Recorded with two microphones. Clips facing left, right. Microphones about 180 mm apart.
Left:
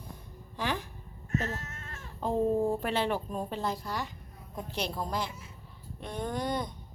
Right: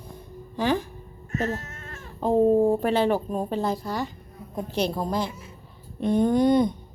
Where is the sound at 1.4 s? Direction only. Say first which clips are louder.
Right 8 dB; 60° right (ahead or behind).